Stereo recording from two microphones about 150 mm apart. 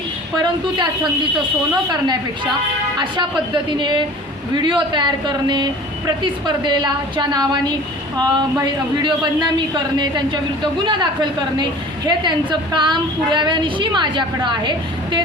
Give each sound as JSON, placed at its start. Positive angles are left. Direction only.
{"t": 3.5, "sound": "a woman's voice", "side_deg": -30}
{"t": 10.6, "sound": "a woman's voice", "side_deg": -30}